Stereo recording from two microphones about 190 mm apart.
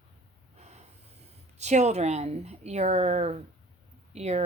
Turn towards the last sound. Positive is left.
turn(degrees=-35)  # may be behind; listen again after turning